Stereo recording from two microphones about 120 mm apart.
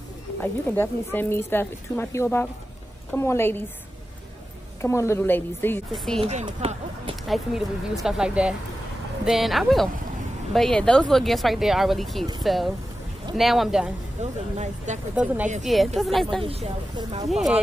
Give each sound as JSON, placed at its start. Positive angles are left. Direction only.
{"t": 0.4, "sound": "a woman's voice", "side_deg": 15}
{"t": 4.8, "sound": "a woman's voice", "side_deg": 25}
{"t": 5.9, "sound": "speech", "side_deg": 5}
{"t": 6.6, "sound": "a sound", "side_deg": -55}
{"t": 7.2, "sound": "speech", "side_deg": 0}
{"t": 14.2, "sound": "speech", "side_deg": -75}
{"t": 15.6, "sound": "speech", "side_deg": 0}
{"t": 16.4, "sound": "speech", "side_deg": -55}
{"t": 17.3, "sound": "speech", "side_deg": 0}